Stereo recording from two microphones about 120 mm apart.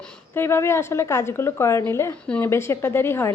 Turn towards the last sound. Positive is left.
turn(degrees=20)  # may be behind; listen again after turning